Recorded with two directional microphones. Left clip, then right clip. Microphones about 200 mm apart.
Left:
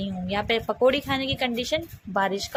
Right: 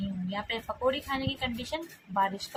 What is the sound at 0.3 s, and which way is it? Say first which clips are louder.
A woman's voice: left 10 dB; 35° left (ahead or behind).